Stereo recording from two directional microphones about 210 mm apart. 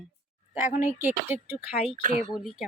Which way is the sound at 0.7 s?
10° right (ahead or behind).